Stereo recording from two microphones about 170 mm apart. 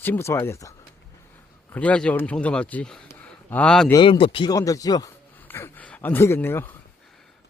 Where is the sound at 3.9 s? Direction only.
30° left (ahead or behind).